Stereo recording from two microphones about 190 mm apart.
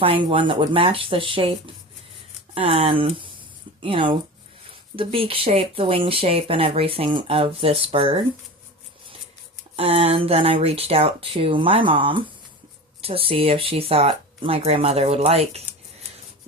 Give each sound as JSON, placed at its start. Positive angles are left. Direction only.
{"t": 0.0, "sound": "speech", "side_deg": -30}
{"t": 9.7, "sound": "speech", "side_deg": -30}